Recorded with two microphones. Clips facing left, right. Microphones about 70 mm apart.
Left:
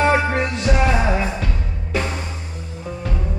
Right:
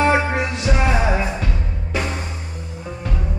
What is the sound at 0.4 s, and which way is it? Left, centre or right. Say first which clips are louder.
Music: left 1 dB; centre.